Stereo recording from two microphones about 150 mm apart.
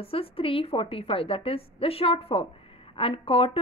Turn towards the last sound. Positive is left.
turn(degrees=40)  # may be behind; listen again after turning